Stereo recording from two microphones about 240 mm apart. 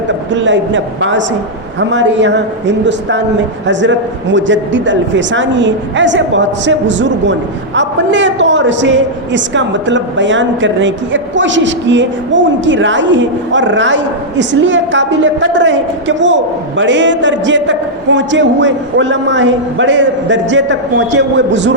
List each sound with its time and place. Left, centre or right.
0.3 s a man's voice: right